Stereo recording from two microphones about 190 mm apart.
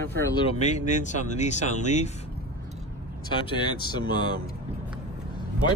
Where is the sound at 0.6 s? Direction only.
40° left (ahead or behind).